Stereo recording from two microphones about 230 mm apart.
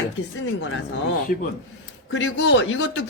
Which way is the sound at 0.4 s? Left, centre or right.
Left.